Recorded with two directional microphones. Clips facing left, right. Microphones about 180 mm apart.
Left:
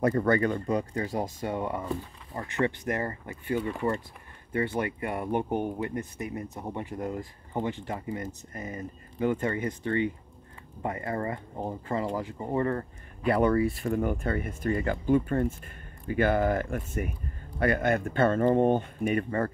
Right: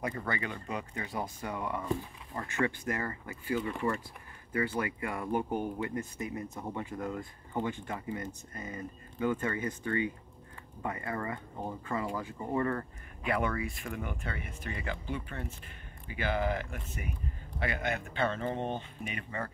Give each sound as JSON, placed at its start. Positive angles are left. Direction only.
{"t": 0.0, "sound": "speech", "side_deg": 45}
{"t": 1.4, "sound": "speech", "side_deg": 30}
{"t": 7.2, "sound": "speech", "side_deg": 30}